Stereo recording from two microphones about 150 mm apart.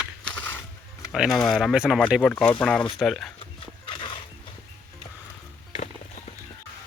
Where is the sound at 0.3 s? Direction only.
15° left (ahead or behind).